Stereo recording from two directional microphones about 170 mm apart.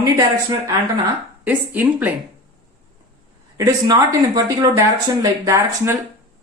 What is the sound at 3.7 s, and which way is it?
A woman's voice, 20° right (ahead or behind).